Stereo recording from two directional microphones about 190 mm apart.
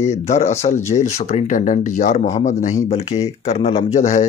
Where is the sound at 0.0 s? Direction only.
35° left (ahead or behind).